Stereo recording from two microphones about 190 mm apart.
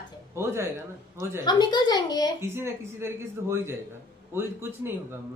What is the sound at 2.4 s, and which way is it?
Speech, 15° right (ahead or behind).